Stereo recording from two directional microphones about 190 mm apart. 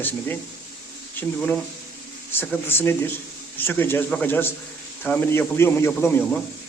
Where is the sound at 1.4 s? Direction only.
Centre (ahead or behind).